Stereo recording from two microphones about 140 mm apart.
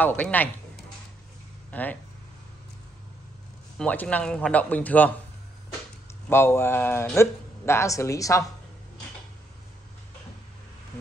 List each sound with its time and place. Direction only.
0.0 s speech: 10° left (ahead or behind)
3.7 s a man's voice: 10° left (ahead or behind)
6.2 s a man's voice: 15° left (ahead or behind)